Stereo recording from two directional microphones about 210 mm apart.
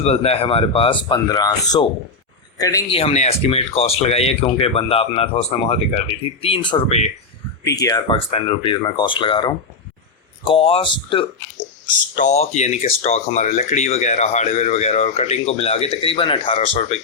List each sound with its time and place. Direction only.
0.0 s speech: 30° left (ahead or behind)
2.9 s speech: 30° left (ahead or behind)
7.6 s speech: 15° left (ahead or behind)
12.1 s speech: 35° left (ahead or behind)